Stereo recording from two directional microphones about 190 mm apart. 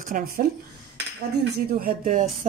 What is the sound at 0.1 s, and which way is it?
Speech, 45° right (ahead or behind).